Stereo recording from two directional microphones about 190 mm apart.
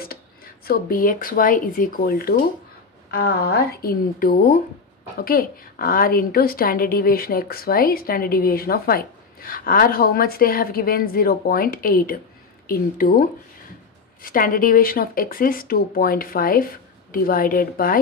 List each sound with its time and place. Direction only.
0.7 s a woman's voice: 50° left (ahead or behind)
14.2 s a woman's voice: 45° left (ahead or behind)